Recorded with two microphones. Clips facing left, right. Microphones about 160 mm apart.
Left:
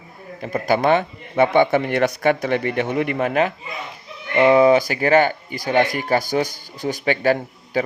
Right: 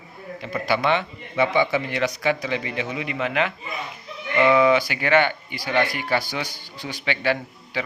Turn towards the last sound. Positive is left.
turn(degrees=45)  # may be behind; listen again after turning